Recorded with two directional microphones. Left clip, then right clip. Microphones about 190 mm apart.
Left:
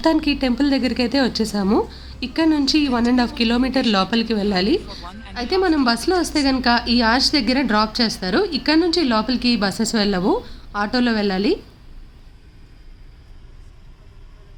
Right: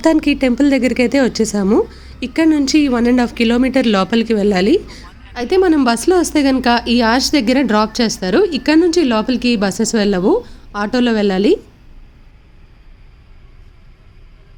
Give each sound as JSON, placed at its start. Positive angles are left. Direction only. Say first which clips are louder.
{"t": 0.0, "sound": "a woman's voice", "louder": "right 5 dB", "side_deg": -20}